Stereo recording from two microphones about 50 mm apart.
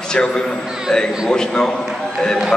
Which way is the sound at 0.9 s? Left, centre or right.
Centre.